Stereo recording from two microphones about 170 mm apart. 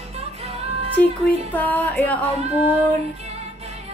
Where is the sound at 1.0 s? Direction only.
10° left (ahead or behind).